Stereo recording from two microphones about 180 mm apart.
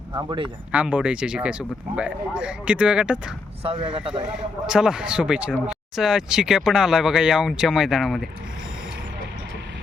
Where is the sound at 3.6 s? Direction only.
25° right (ahead or behind).